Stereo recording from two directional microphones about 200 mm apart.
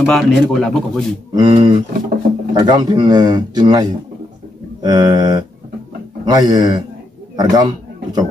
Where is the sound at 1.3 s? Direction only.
25° right (ahead or behind).